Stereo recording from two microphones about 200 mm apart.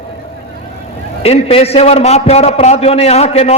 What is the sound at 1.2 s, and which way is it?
A man's voice, 30° left (ahead or behind).